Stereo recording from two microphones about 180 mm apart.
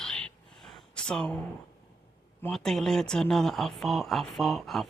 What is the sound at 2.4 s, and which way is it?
Speech, 5° left (ahead or behind).